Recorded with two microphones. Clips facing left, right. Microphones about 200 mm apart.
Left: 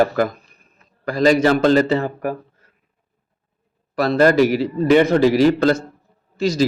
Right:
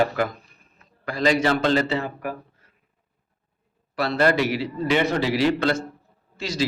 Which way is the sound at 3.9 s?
45° left (ahead or behind).